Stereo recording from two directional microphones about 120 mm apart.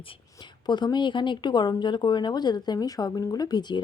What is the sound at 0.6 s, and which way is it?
A woman's voice, 35° left (ahead or behind).